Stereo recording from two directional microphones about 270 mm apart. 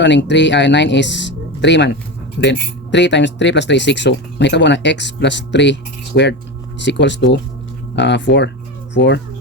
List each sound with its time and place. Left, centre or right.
0.0 s speech: left